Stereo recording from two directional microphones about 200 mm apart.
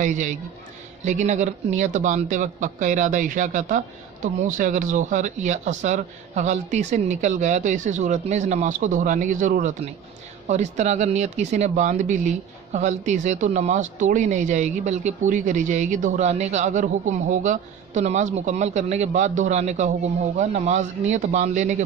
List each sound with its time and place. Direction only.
0.0 s speech: 40° right (ahead or behind)